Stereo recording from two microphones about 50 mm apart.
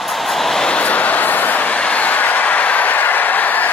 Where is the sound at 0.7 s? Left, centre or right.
Left.